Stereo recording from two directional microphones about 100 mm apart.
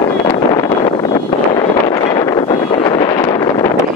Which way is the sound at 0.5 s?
45° left (ahead or behind).